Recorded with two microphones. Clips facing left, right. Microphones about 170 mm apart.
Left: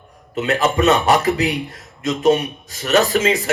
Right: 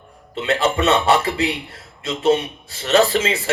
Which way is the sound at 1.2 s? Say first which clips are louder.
Left 3 dB; 30° right (ahead or behind).